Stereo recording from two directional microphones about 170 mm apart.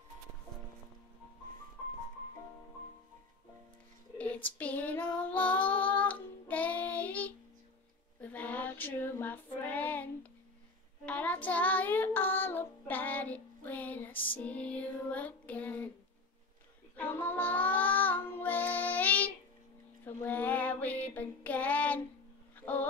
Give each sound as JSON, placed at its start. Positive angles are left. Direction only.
{"t": 4.2, "sound": "female singing", "side_deg": 10}
{"t": 8.2, "sound": "child singing", "side_deg": 10}
{"t": 11.1, "sound": "child singing", "side_deg": 10}
{"t": 14.1, "sound": "music", "side_deg": 30}
{"t": 14.4, "sound": "child singing", "side_deg": 10}
{"t": 16.9, "sound": "child singing", "side_deg": 10}
{"t": 22.6, "sound": "speech", "side_deg": 5}